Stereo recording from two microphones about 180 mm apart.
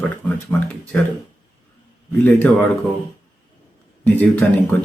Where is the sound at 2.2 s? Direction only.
10° left (ahead or behind).